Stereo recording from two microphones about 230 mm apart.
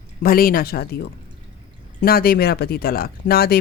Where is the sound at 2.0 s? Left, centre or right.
Left.